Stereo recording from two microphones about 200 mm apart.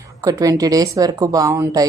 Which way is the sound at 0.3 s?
15° right (ahead or behind).